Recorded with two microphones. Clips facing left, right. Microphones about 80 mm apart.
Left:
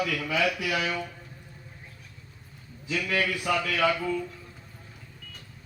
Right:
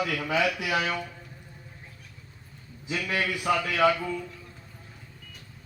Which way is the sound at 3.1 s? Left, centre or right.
Centre.